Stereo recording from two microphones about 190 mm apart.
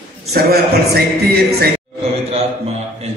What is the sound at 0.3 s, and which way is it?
Speech, 55° right (ahead or behind).